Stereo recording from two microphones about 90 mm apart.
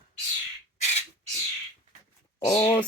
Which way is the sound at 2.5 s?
25° left (ahead or behind).